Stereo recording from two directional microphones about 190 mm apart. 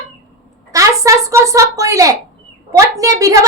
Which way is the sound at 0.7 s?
15° right (ahead or behind).